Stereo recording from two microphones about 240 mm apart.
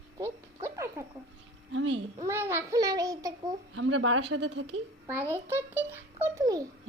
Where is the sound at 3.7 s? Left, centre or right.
Right.